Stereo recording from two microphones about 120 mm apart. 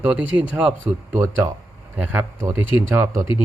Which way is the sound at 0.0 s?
15° right (ahead or behind).